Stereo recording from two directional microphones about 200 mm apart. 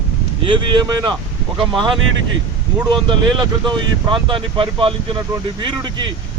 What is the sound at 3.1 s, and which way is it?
Speech, 25° right (ahead or behind).